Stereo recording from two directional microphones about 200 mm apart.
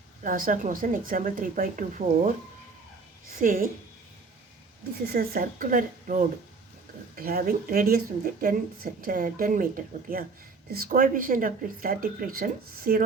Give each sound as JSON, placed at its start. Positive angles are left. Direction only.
{"t": 0.2, "sound": "speech", "side_deg": -40}
{"t": 3.4, "sound": "speech", "side_deg": -45}
{"t": 5.0, "sound": "speech", "side_deg": -50}